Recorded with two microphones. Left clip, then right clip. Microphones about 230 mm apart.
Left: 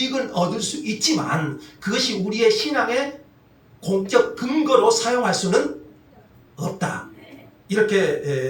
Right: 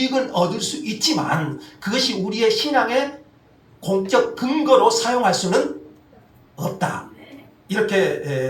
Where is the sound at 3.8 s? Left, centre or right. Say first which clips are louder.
Even; right.